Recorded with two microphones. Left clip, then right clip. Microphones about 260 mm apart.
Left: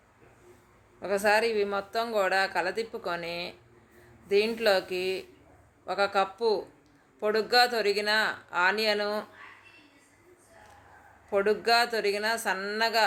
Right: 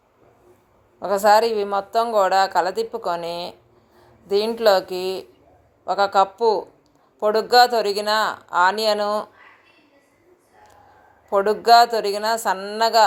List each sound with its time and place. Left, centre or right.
1.0 s speech: centre
11.3 s speech: centre